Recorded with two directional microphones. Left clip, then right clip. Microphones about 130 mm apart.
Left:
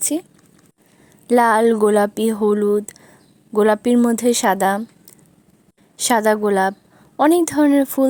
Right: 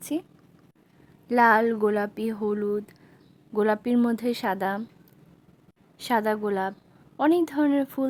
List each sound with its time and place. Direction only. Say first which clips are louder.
0.0 s speech: left 8 dB; 30° left (ahead or behind)
1.3 s speech: left 6 dB; 40° left (ahead or behind)
6.0 s speech: left 9 dB; 35° left (ahead or behind)